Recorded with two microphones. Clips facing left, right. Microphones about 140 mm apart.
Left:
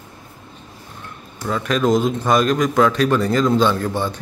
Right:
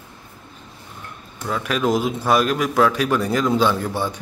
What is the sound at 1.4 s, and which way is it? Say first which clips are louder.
A man's voice: left 3 dB; 5° right (ahead or behind).